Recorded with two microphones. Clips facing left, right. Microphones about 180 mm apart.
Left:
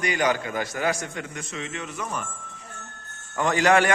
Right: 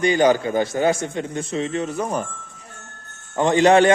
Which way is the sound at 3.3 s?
25° right (ahead or behind).